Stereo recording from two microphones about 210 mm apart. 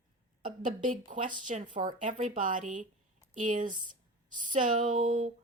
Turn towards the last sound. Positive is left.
turn(degrees=-35)  # may be behind; listen again after turning